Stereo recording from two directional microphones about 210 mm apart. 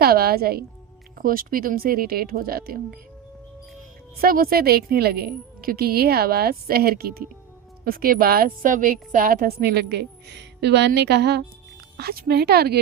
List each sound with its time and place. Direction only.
0.0 s a woman's voice: 45° right (ahead or behind)
4.2 s a woman's voice: 45° right (ahead or behind)